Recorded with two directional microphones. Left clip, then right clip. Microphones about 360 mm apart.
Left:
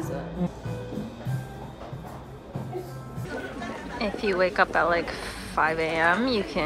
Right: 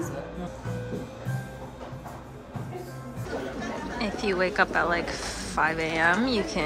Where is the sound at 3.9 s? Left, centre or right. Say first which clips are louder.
Left 3 dB; centre.